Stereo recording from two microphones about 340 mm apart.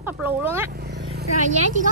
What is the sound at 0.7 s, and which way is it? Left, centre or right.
Vehicle, right.